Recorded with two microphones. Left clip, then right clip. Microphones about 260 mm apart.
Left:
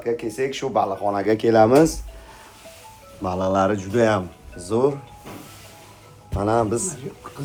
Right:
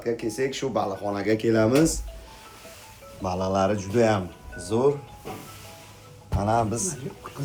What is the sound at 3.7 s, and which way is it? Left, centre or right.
Speech, left.